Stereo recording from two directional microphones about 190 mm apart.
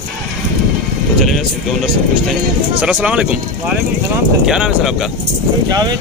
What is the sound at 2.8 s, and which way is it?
Speech, 5° right (ahead or behind).